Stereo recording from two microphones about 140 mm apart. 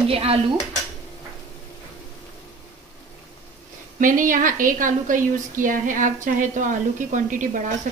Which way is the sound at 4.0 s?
75° right (ahead or behind).